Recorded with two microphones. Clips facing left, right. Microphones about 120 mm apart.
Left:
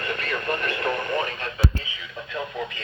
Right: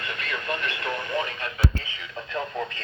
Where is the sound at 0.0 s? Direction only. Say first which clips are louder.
Left 4 dB; 45° left (ahead or behind).